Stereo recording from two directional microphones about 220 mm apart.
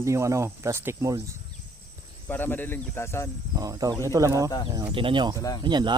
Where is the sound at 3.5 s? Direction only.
15° right (ahead or behind).